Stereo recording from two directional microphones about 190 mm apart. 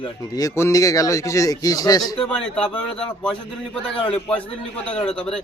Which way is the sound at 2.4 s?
5° left (ahead or behind).